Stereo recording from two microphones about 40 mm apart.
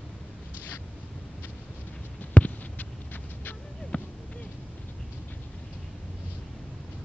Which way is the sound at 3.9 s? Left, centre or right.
Left.